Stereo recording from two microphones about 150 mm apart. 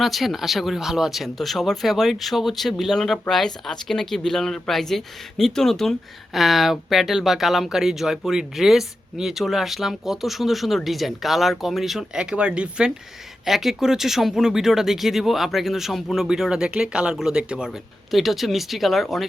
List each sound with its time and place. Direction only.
0.0 s speech: centre (ahead or behind)